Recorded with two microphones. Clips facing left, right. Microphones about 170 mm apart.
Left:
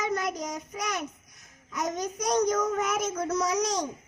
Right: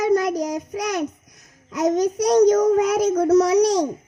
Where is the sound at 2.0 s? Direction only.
35° right (ahead or behind).